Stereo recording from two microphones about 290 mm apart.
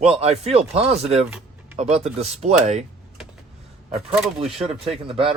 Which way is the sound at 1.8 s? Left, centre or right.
Right.